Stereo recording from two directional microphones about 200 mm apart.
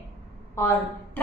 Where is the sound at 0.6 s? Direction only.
10° left (ahead or behind).